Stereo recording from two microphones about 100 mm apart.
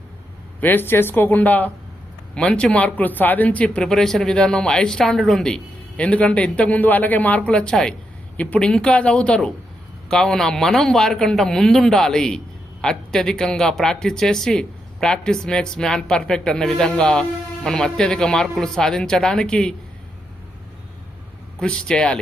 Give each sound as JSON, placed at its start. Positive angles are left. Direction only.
{"t": 0.6, "sound": "a man's voice", "side_deg": 20}
{"t": 21.6, "sound": "speech", "side_deg": 10}